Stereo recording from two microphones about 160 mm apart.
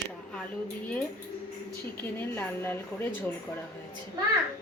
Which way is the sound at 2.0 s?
10° left (ahead or behind).